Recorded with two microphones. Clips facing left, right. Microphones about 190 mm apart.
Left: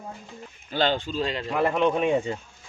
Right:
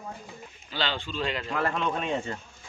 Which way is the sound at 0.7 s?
50° left (ahead or behind).